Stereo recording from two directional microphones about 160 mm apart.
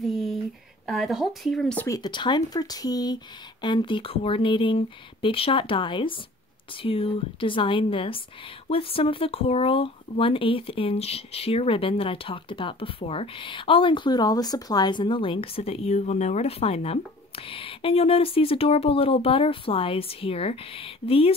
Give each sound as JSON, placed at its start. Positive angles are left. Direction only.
{"t": 0.0, "sound": "a sound", "side_deg": 0}
{"t": 0.8, "sound": "speech", "side_deg": 0}
{"t": 1.9, "sound": "speech", "side_deg": 30}